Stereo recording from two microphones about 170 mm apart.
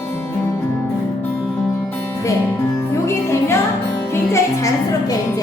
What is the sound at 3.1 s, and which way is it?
Music, 15° left (ahead or behind).